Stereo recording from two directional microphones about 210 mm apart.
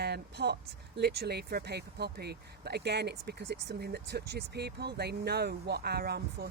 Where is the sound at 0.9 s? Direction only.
50° right (ahead or behind).